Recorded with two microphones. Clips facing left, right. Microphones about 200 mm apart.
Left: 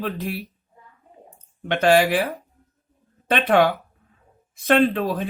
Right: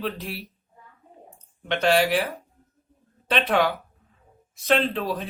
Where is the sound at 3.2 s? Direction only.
55° left (ahead or behind).